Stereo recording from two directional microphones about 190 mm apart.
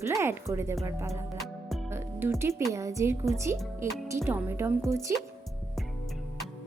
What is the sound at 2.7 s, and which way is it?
Speech, 15° right (ahead or behind).